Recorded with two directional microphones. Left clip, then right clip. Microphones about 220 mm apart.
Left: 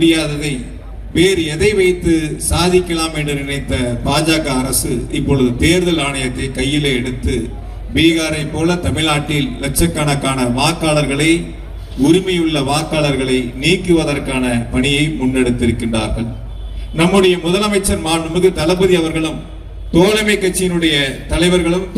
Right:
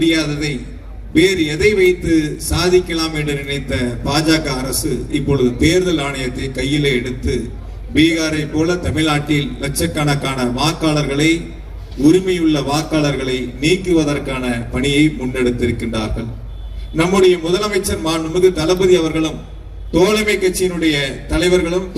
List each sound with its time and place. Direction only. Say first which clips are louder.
0.0 s a man's voice: left 2 dB; 20° right (ahead or behind)